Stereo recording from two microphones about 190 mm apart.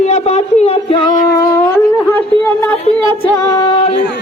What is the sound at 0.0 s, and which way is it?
Speech, 35° left (ahead or behind).